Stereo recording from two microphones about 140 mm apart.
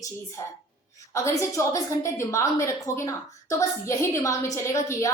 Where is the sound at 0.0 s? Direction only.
20° left (ahead or behind).